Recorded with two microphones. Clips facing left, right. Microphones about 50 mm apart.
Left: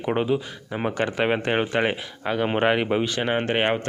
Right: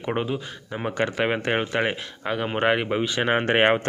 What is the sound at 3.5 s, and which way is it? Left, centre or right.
Speech, right.